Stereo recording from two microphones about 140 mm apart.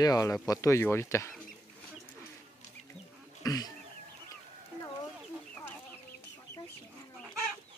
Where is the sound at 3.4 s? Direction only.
25° left (ahead or behind).